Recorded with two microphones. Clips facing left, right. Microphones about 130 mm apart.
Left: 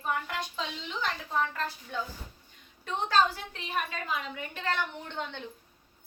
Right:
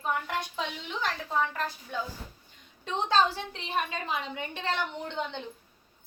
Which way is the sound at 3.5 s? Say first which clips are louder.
Right 2 dB; 30° right (ahead or behind).